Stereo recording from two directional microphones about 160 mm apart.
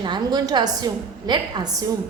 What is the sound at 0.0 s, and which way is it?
A woman's voice, 25° right (ahead or behind).